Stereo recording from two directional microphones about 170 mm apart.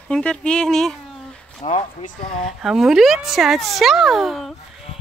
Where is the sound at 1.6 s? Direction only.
50° left (ahead or behind).